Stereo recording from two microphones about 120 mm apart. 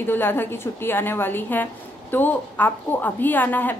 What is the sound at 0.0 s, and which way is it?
A woman's voice, 15° left (ahead or behind).